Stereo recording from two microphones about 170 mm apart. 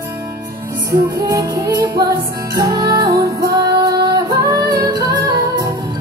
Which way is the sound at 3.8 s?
20° right (ahead or behind).